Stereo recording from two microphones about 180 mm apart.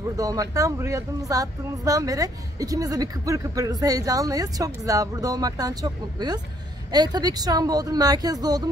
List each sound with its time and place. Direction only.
0.2 s speech: 20° right (ahead or behind)